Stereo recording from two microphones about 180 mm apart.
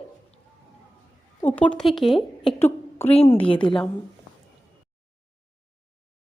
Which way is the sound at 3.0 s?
35° left (ahead or behind).